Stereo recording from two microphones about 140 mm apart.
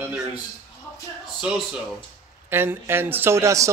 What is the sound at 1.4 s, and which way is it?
A man's voice, 5° right (ahead or behind).